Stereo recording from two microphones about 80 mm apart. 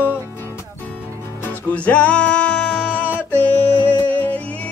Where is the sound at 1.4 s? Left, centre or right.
Left.